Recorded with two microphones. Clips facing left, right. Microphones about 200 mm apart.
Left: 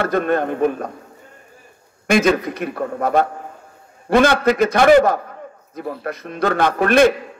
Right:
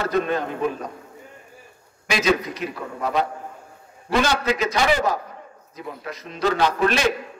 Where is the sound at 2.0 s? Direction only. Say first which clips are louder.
Left 6 dB; 55° left (ahead or behind).